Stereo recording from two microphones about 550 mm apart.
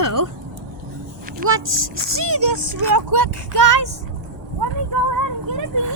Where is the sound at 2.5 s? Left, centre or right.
Right.